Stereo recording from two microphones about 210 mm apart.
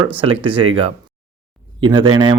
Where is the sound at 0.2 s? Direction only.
25° right (ahead or behind).